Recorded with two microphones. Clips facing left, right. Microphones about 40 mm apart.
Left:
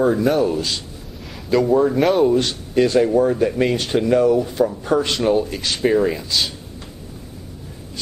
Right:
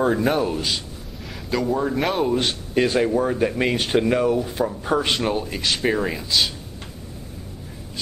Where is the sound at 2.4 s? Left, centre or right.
Centre.